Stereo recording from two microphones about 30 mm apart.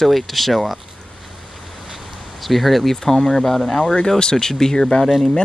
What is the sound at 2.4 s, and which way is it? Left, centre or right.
Speech, centre.